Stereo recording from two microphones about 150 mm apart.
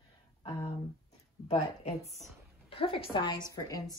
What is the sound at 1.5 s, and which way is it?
A woman's voice, 45° left (ahead or behind).